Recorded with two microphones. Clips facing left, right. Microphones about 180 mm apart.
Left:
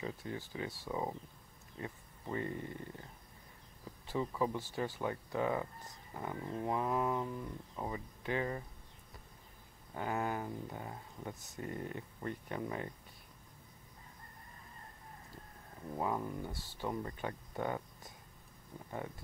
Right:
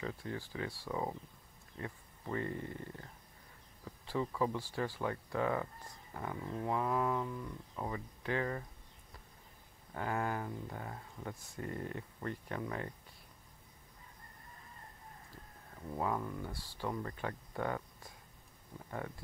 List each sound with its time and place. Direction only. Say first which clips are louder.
0.0 s speech: even; 20° left (ahead or behind)
4.1 s speech: even; 15° left (ahead or behind)
9.9 s speech: even; 20° left (ahead or behind)
16.0 s speech: even; 20° left (ahead or behind)